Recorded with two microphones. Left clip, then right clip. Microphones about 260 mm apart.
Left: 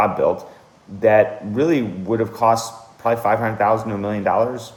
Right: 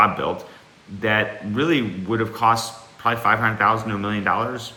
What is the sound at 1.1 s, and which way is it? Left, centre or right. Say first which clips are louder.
A man's voice: left 6 dB; centre.